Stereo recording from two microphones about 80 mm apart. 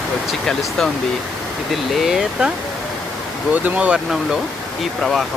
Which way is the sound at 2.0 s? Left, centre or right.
Centre.